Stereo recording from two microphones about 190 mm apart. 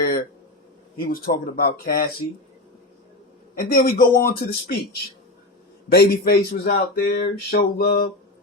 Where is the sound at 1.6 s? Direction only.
50° left (ahead or behind).